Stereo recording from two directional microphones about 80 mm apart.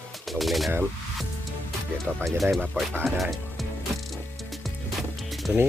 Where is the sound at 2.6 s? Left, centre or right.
Centre.